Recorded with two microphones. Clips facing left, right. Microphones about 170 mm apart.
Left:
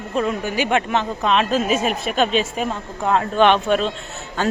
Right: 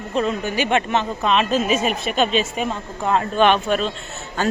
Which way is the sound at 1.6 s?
5° right (ahead or behind).